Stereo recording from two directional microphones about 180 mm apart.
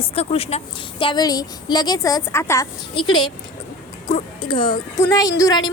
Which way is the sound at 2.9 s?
25° left (ahead or behind).